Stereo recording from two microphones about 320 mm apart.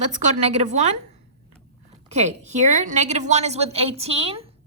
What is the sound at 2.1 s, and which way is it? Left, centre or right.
A woman's voice, right.